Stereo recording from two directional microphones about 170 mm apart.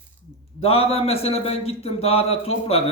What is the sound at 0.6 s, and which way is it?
A man's voice, 35° left (ahead or behind).